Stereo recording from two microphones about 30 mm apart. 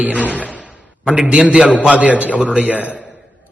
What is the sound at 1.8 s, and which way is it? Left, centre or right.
Speech, right.